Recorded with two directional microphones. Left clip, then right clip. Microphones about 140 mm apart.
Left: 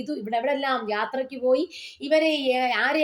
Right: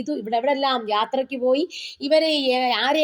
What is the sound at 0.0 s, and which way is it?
Speech, 35° right (ahead or behind).